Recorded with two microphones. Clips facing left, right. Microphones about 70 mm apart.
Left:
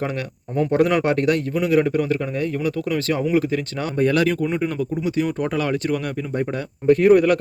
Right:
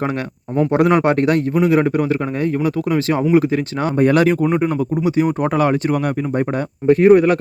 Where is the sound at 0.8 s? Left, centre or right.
Right.